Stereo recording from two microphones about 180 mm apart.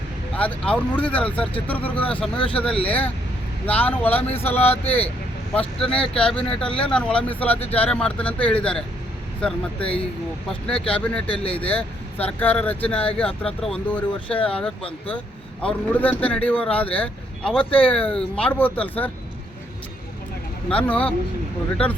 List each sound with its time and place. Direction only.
0.3 s speech: 5° left (ahead or behind)
2.4 s speech: 30° left (ahead or behind)
3.7 s speech: 10° left (ahead or behind)
6.0 s speech: 5° left (ahead or behind)
20.7 s speech: 5° left (ahead or behind)